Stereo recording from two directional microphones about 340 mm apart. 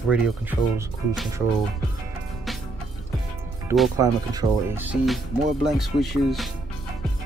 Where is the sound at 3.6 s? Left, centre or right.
Centre.